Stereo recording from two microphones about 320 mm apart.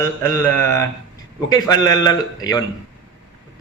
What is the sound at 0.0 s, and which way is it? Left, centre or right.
A man's voice, centre.